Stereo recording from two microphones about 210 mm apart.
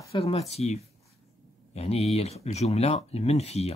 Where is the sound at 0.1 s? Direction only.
30° left (ahead or behind).